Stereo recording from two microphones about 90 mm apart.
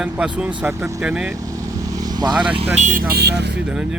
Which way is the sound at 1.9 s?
45° right (ahead or behind).